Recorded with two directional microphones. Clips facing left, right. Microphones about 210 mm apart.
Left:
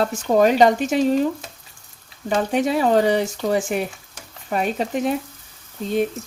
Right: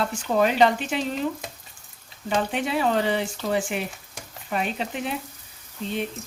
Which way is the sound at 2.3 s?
40° left (ahead or behind).